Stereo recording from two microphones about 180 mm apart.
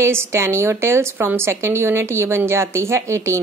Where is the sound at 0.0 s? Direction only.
15° right (ahead or behind).